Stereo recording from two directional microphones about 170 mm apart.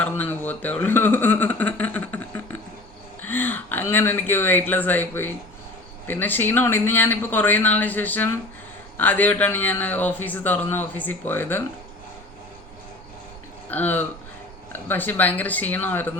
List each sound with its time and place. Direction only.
0.0 s a sound: 10° left (ahead or behind)
3.2 s a man's voice: 10° left (ahead or behind)
13.7 s a man's voice: 10° left (ahead or behind)